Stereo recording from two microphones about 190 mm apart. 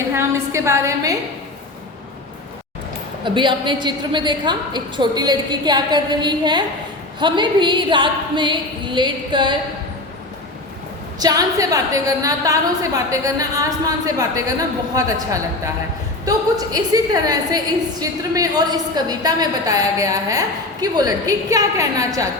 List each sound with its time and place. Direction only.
0.1 s a woman's voice: 15° right (ahead or behind)
3.2 s a woman's voice: 25° right (ahead or behind)
11.2 s a woman's voice: 20° right (ahead or behind)